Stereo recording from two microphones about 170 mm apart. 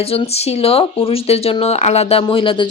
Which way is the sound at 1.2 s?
35° left (ahead or behind).